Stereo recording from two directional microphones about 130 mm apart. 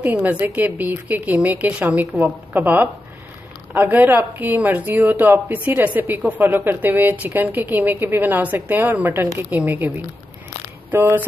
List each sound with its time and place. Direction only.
0.0 s speech: 10° right (ahead or behind)